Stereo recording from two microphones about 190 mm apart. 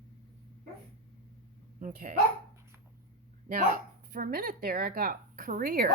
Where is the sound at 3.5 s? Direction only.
45° right (ahead or behind).